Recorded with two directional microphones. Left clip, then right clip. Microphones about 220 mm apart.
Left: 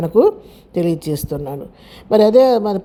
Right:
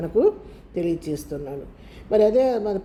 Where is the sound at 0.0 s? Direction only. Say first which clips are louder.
Left 7 dB; 40° left (ahead or behind).